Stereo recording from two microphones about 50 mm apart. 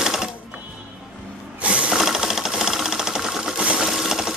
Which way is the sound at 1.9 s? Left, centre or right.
Centre.